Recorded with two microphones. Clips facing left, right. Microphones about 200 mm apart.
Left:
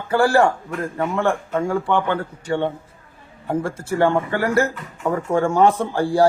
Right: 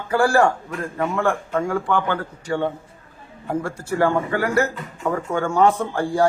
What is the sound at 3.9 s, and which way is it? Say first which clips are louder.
A man's voice: left 1 dB; 30° left (ahead or behind).